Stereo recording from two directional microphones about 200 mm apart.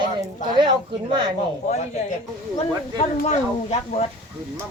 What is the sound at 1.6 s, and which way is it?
Speech, 35° left (ahead or behind).